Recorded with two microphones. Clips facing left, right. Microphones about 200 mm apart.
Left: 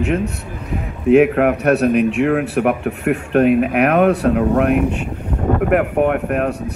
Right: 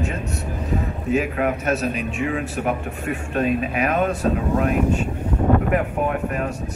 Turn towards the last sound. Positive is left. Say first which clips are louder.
# left 6 dB
turn(degrees=60)  # may be behind; listen again after turning